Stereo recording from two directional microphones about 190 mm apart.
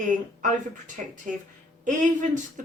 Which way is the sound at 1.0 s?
45° right (ahead or behind).